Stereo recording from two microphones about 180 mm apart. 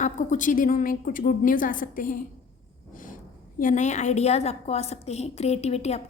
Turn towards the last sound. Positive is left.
turn(degrees=35)  # may be behind; listen again after turning